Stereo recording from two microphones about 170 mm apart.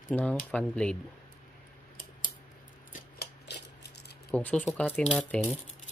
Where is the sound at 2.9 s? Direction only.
70° left (ahead or behind).